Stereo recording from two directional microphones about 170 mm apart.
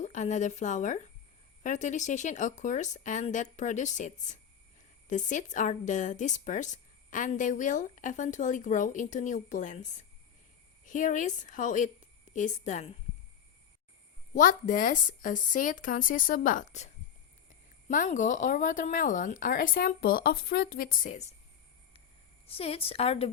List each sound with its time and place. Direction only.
0.0 s speech: 45° left (ahead or behind)
14.3 s speech: 50° left (ahead or behind)
22.4 s a woman's voice: 35° left (ahead or behind)